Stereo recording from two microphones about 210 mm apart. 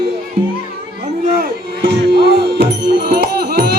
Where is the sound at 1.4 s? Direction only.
50° right (ahead or behind).